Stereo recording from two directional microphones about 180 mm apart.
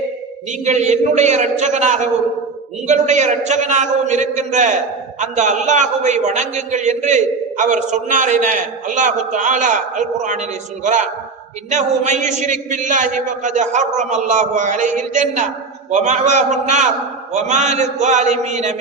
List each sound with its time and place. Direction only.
0.6 s a man's voice: 40° right (ahead or behind)
11.7 s a man's voice: 40° right (ahead or behind)